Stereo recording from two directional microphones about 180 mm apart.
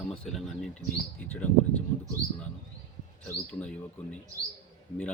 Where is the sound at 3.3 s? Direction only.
5° left (ahead or behind).